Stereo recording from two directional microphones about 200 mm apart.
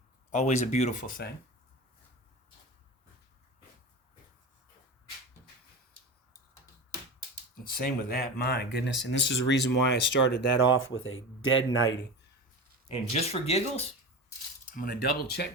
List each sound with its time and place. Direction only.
0.3 s speech: 35° left (ahead or behind)
7.7 s speech: 45° left (ahead or behind)
10.8 s speech: 80° left
12.9 s speech: 30° left (ahead or behind)
14.7 s speech: 45° left (ahead or behind)